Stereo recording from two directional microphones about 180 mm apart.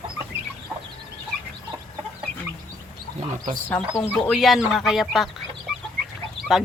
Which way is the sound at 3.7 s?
15° left (ahead or behind).